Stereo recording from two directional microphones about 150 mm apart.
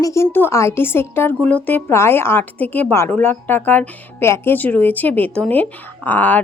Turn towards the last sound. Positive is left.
turn(degrees=10)  # may be behind; listen again after turning